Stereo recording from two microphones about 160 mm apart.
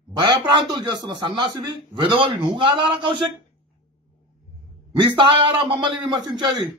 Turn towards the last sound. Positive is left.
turn(degrees=-30)  # may be behind; listen again after turning